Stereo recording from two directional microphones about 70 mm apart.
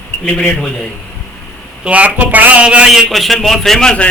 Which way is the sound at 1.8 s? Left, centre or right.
Centre.